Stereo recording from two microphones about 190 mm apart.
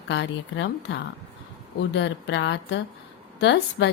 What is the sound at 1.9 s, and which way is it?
A woman's voice, 70° left (ahead or behind).